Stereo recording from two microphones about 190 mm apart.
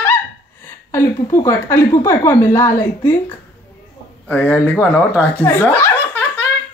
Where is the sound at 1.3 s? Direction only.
15° left (ahead or behind).